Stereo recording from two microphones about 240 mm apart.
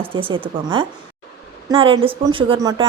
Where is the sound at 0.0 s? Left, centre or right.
Right.